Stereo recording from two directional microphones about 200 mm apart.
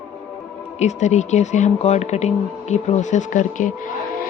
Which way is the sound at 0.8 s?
35° left (ahead or behind).